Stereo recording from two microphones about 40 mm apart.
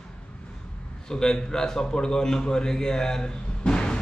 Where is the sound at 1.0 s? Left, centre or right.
Centre.